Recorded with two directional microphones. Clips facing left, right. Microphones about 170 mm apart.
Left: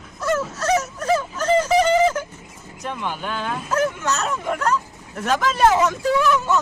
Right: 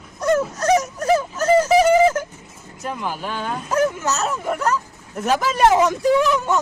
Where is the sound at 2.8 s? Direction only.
5° right (ahead or behind).